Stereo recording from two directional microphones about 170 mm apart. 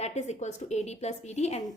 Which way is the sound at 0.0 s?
40° left (ahead or behind).